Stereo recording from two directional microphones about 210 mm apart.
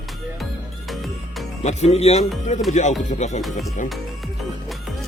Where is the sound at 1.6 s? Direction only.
30° left (ahead or behind).